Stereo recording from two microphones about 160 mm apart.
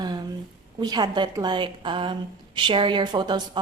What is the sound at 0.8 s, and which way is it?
A woman's voice, 25° right (ahead or behind).